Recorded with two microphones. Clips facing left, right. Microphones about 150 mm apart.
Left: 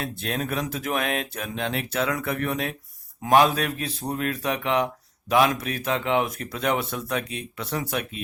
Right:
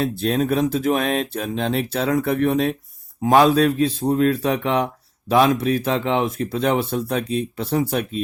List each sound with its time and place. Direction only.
0.0 s speech: 35° right (ahead or behind)